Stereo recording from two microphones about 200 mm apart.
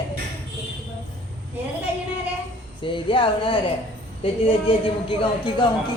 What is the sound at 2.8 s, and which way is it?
A man's voice, 25° left (ahead or behind).